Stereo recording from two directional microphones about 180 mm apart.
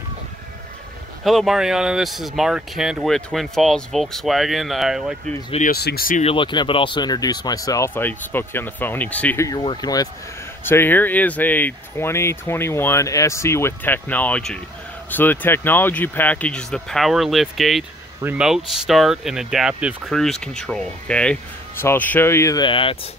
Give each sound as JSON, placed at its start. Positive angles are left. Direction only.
{"t": 1.2, "sound": "speech", "side_deg": 0}
{"t": 5.7, "sound": "speech", "side_deg": 60}
{"t": 6.2, "sound": "speech", "side_deg": 30}
{"t": 9.5, "sound": "speech", "side_deg": 25}